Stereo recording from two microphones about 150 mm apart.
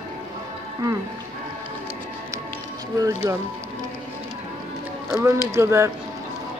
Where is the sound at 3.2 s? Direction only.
25° right (ahead or behind).